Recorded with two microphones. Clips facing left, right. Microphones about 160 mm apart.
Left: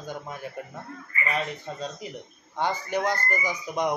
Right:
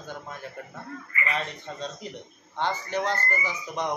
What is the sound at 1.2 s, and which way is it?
Speech, 5° left (ahead or behind).